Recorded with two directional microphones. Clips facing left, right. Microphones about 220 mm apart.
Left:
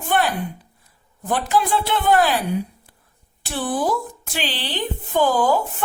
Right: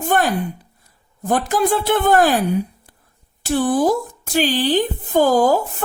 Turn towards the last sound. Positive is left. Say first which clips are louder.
# right 4 dB
turn(degrees=-40)  # may be behind; listen again after turning